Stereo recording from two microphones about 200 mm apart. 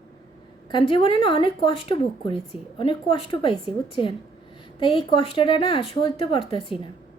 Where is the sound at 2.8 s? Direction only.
25° left (ahead or behind).